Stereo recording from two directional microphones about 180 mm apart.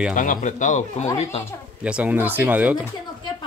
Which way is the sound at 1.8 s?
5° right (ahead or behind).